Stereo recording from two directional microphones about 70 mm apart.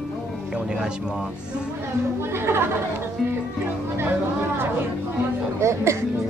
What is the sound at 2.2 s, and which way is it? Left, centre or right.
Speech, right.